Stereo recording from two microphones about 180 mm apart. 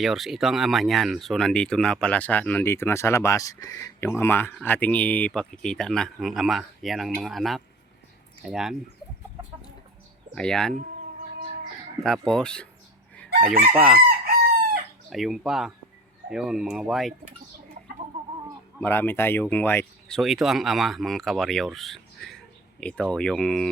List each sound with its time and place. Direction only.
0.0 s speech: centre (ahead or behind)
10.3 s speech: 5° left (ahead or behind)
12.0 s speech: 5° left (ahead or behind)
13.4 s chicken: 50° right (ahead or behind)
13.7 s speech: centre (ahead or behind)
14.1 s chicken: 55° right (ahead or behind)
15.1 s speech: centre (ahead or behind)
18.8 s speech: 10° left (ahead or behind)